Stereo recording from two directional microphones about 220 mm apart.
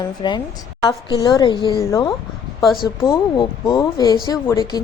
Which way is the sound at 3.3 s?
20° left (ahead or behind).